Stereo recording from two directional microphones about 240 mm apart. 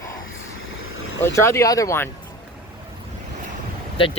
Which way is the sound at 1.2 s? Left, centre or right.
Centre.